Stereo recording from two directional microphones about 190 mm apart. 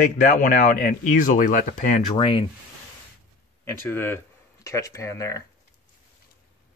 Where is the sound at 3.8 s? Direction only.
10° left (ahead or behind).